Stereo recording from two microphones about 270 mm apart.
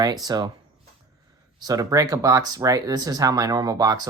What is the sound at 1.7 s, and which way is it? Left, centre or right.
Speech, centre.